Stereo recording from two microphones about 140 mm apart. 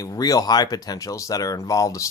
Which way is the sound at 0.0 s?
25° left (ahead or behind).